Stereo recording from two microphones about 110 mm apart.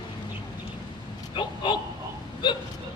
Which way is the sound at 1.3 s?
45° left (ahead or behind).